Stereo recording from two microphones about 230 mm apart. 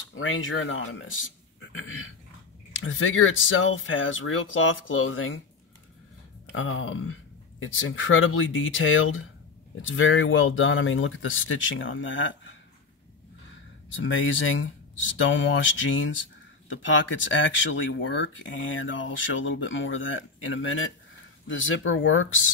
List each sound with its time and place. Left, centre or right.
0.1 s speech: left
6.5 s speech: left
14.0 s speech: left